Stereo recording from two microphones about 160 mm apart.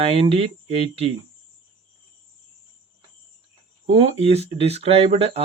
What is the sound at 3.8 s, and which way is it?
Speech, 35° right (ahead or behind).